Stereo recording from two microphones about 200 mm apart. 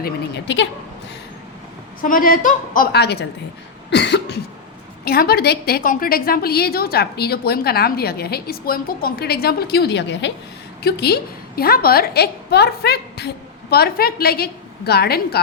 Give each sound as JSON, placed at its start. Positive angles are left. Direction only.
{"t": 0.0, "sound": "speech", "side_deg": 60}
{"t": 2.0, "sound": "a woman's voice", "side_deg": 45}
{"t": 3.8, "sound": "cough", "side_deg": 60}
{"t": 5.0, "sound": "a woman's voice", "side_deg": 50}
{"t": 10.8, "sound": "a woman's voice", "side_deg": 50}